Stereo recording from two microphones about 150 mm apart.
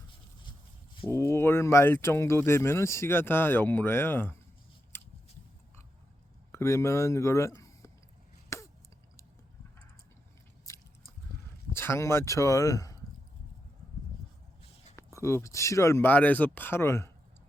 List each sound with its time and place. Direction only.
1.1 s speech: 15° left (ahead or behind)
4.9 s a sound: 15° left (ahead or behind)
6.5 s speech: 20° left (ahead or behind)
8.5 s a sound: 20° left (ahead or behind)
10.7 s biting: 20° left (ahead or behind)
11.7 s speech: 15° left (ahead or behind)
14.9 s speech: 20° left (ahead or behind)